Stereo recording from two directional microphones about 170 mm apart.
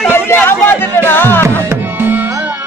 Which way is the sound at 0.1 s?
15° left (ahead or behind).